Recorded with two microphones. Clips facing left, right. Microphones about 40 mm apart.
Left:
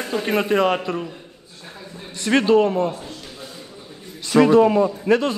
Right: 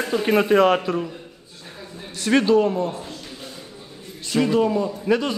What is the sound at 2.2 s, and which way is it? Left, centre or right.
Speech, centre.